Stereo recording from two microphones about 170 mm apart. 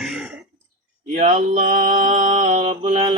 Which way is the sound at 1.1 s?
50° right (ahead or behind).